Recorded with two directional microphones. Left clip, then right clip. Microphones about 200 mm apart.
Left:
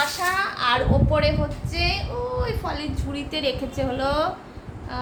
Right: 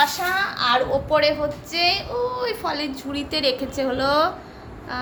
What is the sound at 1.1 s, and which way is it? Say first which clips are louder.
A woman's voice: right 3 dB; 25° right (ahead or behind).